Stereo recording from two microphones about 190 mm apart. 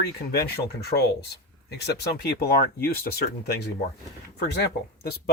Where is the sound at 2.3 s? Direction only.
55° left (ahead or behind).